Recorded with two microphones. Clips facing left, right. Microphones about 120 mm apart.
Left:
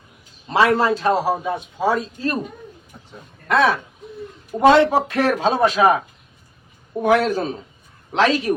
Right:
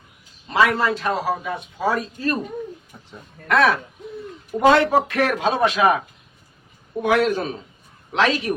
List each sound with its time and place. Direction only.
0.5 s a man's voice: 30° left (ahead or behind)
2.9 s a sound: 5° left (ahead or behind)
3.5 s a man's voice: 25° left (ahead or behind)
7.0 s speech: 40° left (ahead or behind)